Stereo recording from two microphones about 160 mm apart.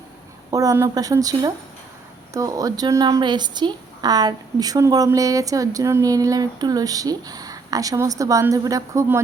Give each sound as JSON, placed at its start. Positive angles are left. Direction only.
{"t": 0.5, "sound": "a woman's voice", "side_deg": -20}